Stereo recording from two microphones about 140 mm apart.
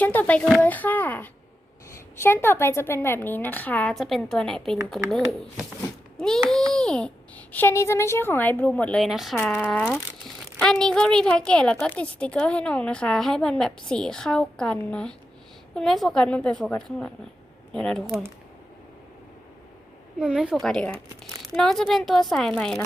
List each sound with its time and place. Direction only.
0.0 s a child's voice: 10° left (ahead or behind)
3.9 s a woman's voice: centre (ahead or behind)
9.0 s a woman's voice: centre (ahead or behind)
20.1 s a woman's voice: 5° right (ahead or behind)